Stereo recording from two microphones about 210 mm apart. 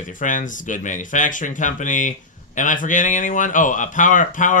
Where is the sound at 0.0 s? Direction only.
35° left (ahead or behind).